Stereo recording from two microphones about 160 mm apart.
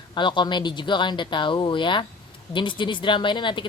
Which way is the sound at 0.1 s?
30° left (ahead or behind).